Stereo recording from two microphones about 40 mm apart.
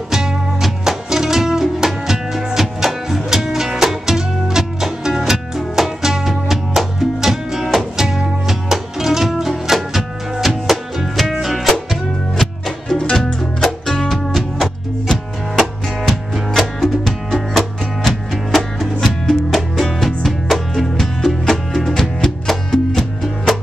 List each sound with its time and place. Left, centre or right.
0.1 s music: centre
14.3 s music: centre